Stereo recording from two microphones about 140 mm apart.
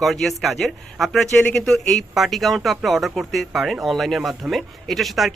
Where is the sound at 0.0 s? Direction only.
Centre (ahead or behind).